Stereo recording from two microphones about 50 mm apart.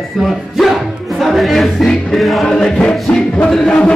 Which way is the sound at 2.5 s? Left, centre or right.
Centre.